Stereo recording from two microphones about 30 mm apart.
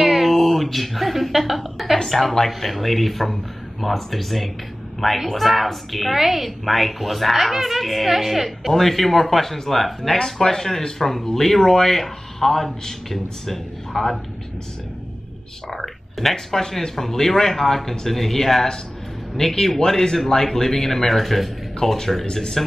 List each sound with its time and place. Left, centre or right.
0.0 s a sound: centre
1.5 s a woman's voice: centre
2.0 s a woman's voice: centre
6.1 s a woman's voice: centre
6.6 s a woman's voice: centre
8.5 s speech: centre
10.2 s a woman's voice: centre
15.7 s speech: centre
21.8 s speech: centre
22.6 s a woman's voice: centre